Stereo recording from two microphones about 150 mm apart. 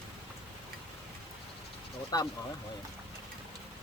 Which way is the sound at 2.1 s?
25° left (ahead or behind).